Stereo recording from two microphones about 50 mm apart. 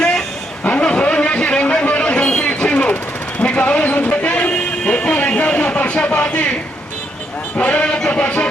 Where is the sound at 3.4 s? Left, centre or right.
Left.